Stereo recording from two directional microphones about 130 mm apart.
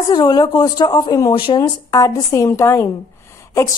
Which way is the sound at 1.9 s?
25° left (ahead or behind).